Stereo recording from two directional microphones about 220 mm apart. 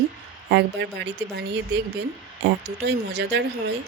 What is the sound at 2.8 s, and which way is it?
Speech, 50° right (ahead or behind).